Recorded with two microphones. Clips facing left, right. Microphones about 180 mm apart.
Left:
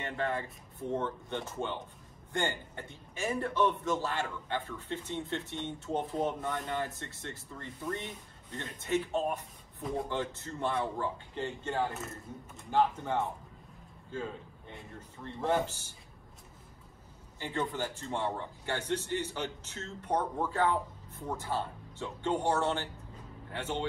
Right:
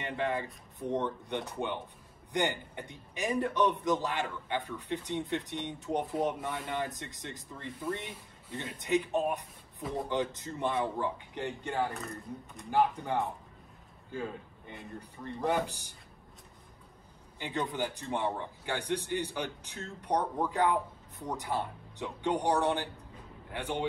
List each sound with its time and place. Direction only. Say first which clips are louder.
0.0 s speech: right 1 dB; 15° right (ahead or behind)
11.9 s speech: right 2 dB; 5° left (ahead or behind)
12.7 s a man's voice: even; 15° right (ahead or behind)
17.4 s speech: right 1 dB; 15° right (ahead or behind)